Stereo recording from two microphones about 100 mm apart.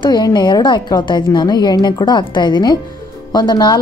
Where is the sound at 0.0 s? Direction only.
45° left (ahead or behind).